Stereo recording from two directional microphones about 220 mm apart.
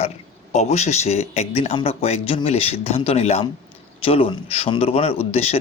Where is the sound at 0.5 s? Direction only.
30° left (ahead or behind).